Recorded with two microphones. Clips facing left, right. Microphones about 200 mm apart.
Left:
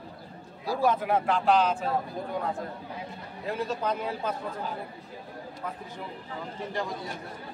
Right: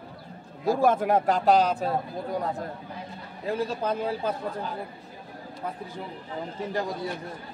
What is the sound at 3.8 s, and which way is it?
Speech, 30° right (ahead or behind).